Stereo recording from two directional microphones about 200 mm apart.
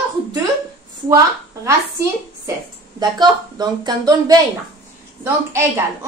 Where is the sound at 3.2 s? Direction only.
20° right (ahead or behind).